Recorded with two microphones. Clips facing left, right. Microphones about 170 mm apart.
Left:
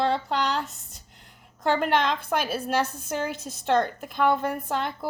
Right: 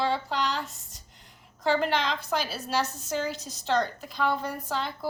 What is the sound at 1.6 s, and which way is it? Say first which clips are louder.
A woman's voice: left 2 dB; 50° left (ahead or behind).